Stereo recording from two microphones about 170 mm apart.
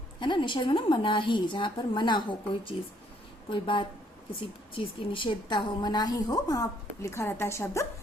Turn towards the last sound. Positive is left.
turn(degrees=15)  # may be behind; listen again after turning